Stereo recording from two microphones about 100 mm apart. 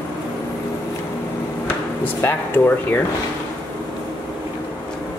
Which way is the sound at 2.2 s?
20° left (ahead or behind).